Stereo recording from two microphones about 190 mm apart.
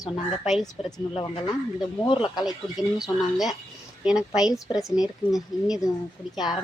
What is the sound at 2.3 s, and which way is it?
A woman's voice, centre (ahead or behind).